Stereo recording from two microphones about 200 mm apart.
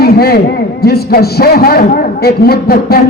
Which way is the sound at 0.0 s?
50° left (ahead or behind).